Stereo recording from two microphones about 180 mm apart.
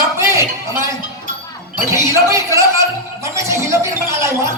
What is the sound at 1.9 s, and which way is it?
Speech, 15° right (ahead or behind).